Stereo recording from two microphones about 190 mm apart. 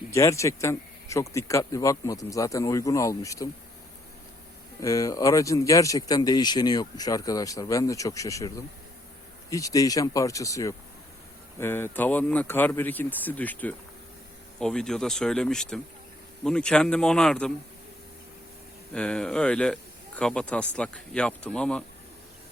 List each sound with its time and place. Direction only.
0.1 s speech: 15° left (ahead or behind)
4.8 s speech: 15° left (ahead or behind)
18.9 s speech: 5° left (ahead or behind)